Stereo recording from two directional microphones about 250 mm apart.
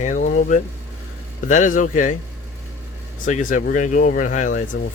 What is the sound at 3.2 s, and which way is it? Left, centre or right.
Speech, left.